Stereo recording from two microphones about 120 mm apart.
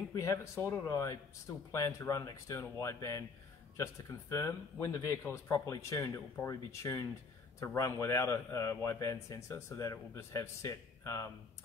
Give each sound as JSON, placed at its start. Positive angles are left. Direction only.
{"t": 0.1, "sound": "a man's voice", "side_deg": 25}